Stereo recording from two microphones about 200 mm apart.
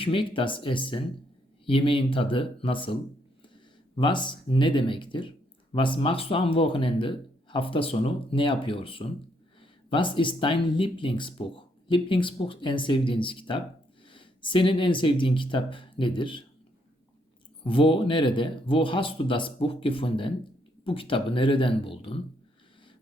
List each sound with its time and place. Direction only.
0.0 s speech: 25° left (ahead or behind)
17.6 s speech: 25° left (ahead or behind)